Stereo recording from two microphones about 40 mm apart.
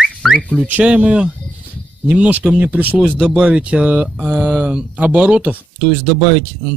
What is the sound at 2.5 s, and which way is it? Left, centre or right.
Speech, right.